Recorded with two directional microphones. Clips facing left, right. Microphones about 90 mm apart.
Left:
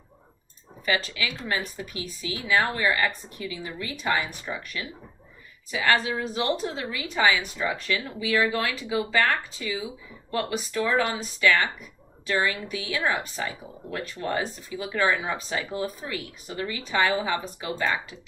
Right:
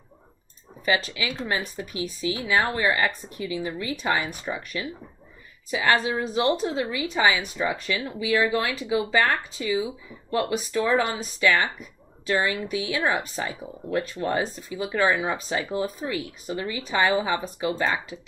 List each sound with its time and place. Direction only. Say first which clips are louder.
0.9 s a woman's voice: right 2 dB; 25° right (ahead or behind)